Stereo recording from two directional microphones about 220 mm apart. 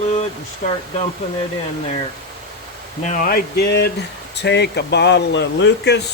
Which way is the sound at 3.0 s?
40° left (ahead or behind).